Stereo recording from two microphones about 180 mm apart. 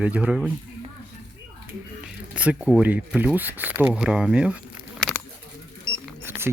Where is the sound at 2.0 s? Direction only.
5° right (ahead or behind).